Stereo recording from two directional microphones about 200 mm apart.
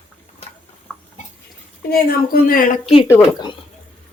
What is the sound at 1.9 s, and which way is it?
Speech, 50° left (ahead or behind).